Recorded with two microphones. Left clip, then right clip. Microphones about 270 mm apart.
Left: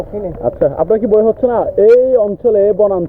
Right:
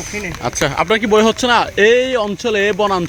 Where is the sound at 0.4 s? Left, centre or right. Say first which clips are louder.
Left 3 dB; right.